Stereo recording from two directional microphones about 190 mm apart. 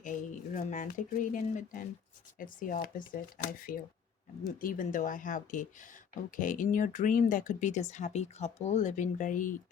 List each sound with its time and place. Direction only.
0.0 s speech: 40° left (ahead or behind)